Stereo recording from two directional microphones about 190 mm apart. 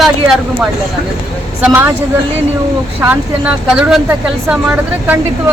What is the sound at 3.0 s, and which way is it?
Speech, 10° right (ahead or behind).